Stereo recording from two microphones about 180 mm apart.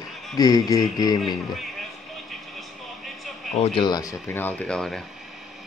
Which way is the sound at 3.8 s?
20° left (ahead or behind).